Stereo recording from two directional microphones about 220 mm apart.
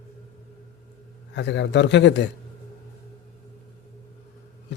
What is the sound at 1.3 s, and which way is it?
Speech, 55° left (ahead or behind).